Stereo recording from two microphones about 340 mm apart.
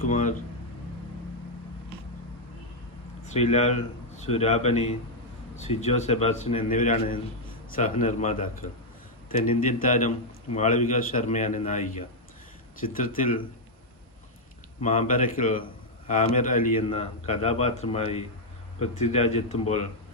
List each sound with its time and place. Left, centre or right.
0.1 s a man's voice: left
3.2 s a man's voice: centre
14.8 s a man's voice: left